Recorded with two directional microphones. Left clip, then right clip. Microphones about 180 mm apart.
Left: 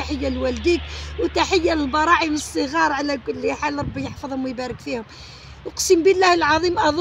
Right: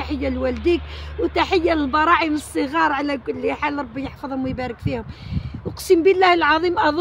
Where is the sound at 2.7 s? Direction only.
15° right (ahead or behind).